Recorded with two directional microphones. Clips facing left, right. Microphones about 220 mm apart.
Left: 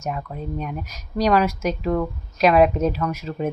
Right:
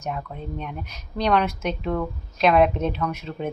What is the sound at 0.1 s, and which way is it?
Speech, 5° left (ahead or behind).